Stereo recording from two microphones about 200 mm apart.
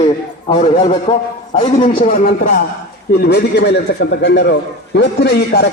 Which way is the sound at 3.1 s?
55° left (ahead or behind).